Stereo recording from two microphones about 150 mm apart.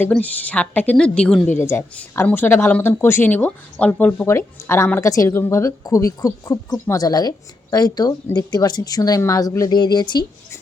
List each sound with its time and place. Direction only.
0.1 s a woman's voice: 10° left (ahead or behind); by 10.2 s 30° left (ahead or behind)